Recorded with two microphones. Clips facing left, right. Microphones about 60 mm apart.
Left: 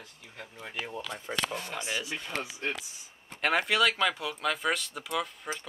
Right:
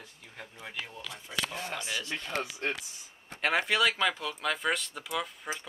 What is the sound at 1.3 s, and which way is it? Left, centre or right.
Speech, left.